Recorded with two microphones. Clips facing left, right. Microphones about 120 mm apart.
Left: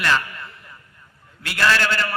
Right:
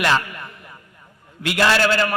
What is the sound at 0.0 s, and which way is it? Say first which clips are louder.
A man's voice: right 2 dB; 20° right (ahead or behind).